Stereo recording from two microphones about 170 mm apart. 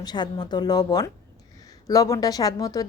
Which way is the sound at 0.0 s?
25° left (ahead or behind).